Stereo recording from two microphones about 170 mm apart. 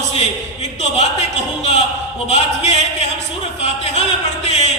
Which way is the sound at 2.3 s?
40° left (ahead or behind).